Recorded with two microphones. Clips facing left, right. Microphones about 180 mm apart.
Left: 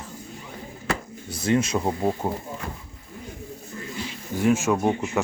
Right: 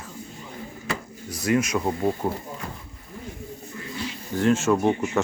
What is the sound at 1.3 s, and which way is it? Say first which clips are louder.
Speech: even; 30° left (ahead or behind).